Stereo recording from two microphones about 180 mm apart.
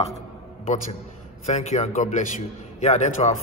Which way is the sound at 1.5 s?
40° left (ahead or behind).